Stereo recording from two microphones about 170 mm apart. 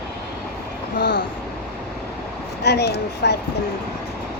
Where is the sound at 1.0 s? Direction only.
90° left.